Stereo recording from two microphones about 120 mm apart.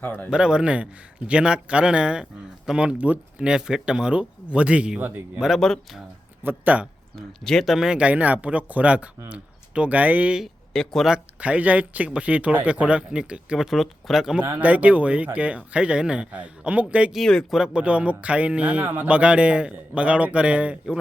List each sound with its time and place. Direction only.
0.0 s speech: 15° left (ahead or behind)
0.3 s speech: 5° right (ahead or behind)
5.5 s speech: 5° left (ahead or behind)
6.4 s speech: 15° right (ahead or behind)
7.2 s speech: 5° left (ahead or behind)
14.4 s speech: 15° right (ahead or behind)